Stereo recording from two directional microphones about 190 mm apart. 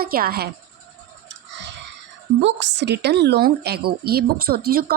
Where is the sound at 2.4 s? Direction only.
70° right (ahead or behind); by 4.9 s 50° right (ahead or behind).